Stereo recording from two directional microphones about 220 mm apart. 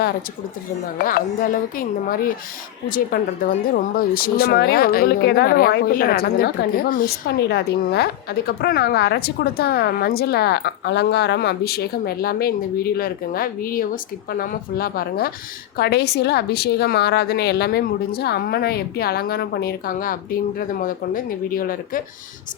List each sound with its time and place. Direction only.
1.0 s speech: 40° left (ahead or behind)